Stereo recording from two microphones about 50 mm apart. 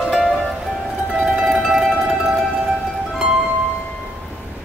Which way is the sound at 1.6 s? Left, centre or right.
Centre.